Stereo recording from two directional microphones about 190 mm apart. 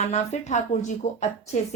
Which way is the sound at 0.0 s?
35° left (ahead or behind).